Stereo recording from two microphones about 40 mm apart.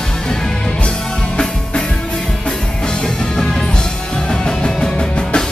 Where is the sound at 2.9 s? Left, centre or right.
Centre.